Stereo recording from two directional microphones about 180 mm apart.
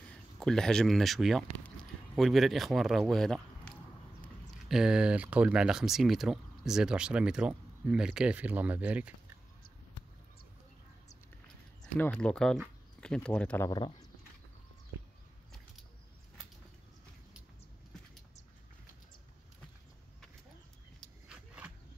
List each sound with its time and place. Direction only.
0.1 s speech: 5° left (ahead or behind)
11.8 s speech: 5° left (ahead or behind)
13.7 s speech: 25° left (ahead or behind)
21.0 s roaring cats: 5° right (ahead or behind)